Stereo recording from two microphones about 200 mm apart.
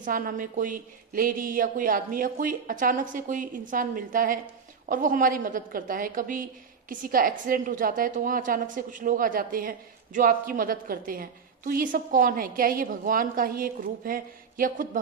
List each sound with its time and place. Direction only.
0.0 s a woman's voice: 45° right (ahead or behind)